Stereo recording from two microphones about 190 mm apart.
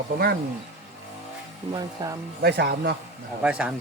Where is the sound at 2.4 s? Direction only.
55° right (ahead or behind).